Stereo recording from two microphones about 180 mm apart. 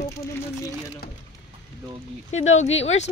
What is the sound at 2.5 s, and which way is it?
Speech, 35° left (ahead or behind).